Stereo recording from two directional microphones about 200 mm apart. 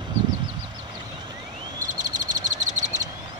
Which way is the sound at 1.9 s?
40° right (ahead or behind).